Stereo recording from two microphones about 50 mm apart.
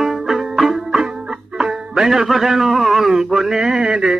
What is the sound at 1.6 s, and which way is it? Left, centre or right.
Speech, centre.